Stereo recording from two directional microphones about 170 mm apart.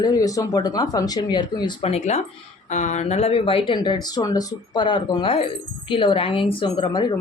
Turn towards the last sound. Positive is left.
turn(degrees=25)  # may be behind; listen again after turning